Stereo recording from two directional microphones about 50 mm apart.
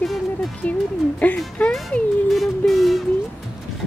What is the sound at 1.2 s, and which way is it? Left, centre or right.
Speech, left.